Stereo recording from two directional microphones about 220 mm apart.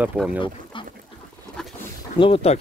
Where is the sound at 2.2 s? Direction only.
25° left (ahead or behind).